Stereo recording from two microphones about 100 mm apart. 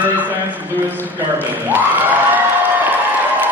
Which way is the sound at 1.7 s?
15° right (ahead or behind).